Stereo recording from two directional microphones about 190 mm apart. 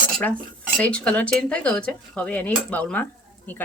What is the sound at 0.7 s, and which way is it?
Speech, 5° left (ahead or behind).